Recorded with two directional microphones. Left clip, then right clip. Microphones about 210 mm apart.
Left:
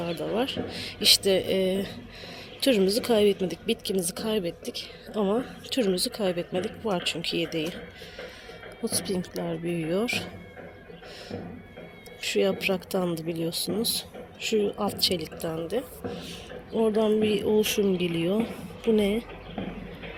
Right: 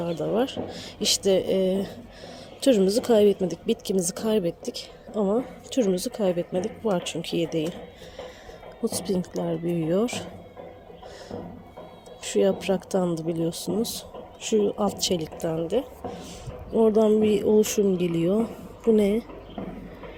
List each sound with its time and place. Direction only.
0.0 s a woman's voice: 15° right (ahead or behind)
8.8 s a woman's voice: 20° right (ahead or behind)
12.3 s a woman's voice: 15° right (ahead or behind)